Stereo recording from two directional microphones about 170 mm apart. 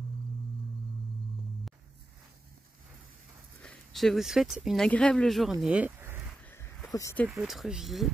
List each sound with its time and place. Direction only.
3.6 s speech: centre (ahead or behind)
6.5 s a sound: 15° left (ahead or behind)
7.2 s speech: centre (ahead or behind)